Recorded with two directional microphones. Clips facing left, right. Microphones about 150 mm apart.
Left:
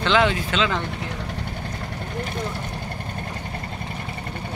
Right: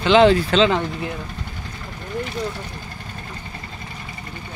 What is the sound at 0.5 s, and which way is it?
Speech, 35° right (ahead or behind).